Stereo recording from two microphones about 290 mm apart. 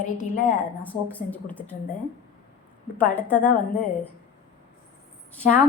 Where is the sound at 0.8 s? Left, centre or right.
Centre.